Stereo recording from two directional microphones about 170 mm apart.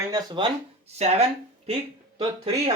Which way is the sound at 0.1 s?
25° right (ahead or behind).